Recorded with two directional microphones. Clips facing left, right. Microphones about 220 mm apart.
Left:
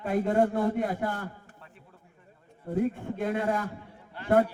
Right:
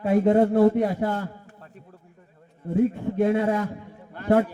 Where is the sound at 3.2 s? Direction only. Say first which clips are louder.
Right 6 dB; 25° right (ahead or behind).